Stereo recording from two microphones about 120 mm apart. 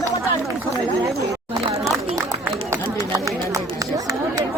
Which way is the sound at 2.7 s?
30° right (ahead or behind).